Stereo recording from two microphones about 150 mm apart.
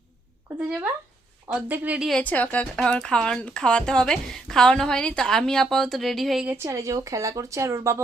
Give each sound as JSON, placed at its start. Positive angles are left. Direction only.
{"t": 1.5, "sound": "speech", "side_deg": -10}
{"t": 6.5, "sound": "speech", "side_deg": -20}